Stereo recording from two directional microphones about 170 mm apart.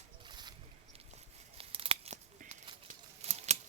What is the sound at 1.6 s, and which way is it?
Tearing, 35° right (ahead or behind).